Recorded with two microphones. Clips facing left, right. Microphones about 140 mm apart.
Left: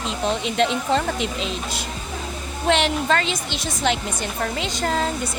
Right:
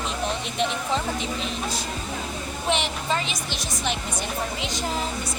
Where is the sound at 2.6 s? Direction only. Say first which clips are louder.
Left 7 dB; 70° left (ahead or behind).